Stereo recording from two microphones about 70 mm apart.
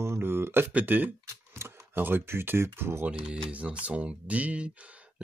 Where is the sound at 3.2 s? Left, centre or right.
Centre.